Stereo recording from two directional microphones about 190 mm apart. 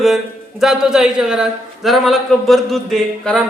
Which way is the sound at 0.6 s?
5° right (ahead or behind).